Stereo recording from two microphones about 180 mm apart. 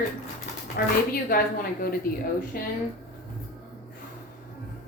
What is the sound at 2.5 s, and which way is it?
Speech, 55° left (ahead or behind).